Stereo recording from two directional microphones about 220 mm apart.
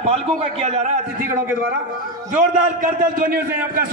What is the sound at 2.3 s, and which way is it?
A man's voice, 40° right (ahead or behind).